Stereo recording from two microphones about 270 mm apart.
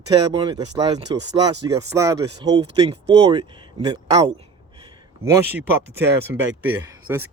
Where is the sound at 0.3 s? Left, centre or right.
Centre.